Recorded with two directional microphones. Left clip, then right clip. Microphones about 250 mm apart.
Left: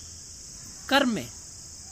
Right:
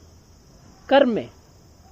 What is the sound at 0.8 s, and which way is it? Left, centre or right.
Speech, left.